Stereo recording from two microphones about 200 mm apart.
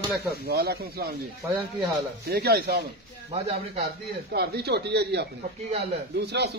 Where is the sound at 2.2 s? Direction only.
50° right (ahead or behind).